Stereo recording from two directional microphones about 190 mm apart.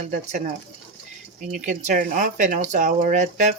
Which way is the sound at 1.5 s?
40° right (ahead or behind).